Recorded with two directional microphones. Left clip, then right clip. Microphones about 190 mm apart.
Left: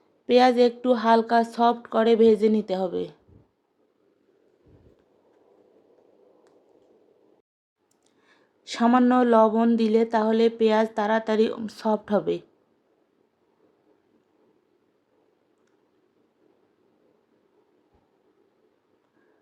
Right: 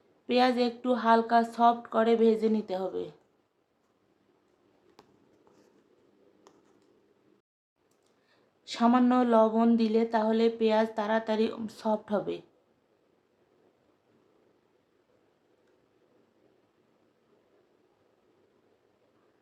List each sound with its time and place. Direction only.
0.3 s speech: 30° left (ahead or behind)
8.3 s speech: 30° left (ahead or behind)